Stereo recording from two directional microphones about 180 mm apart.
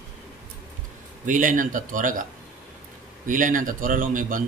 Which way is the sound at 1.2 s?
45° right (ahead or behind).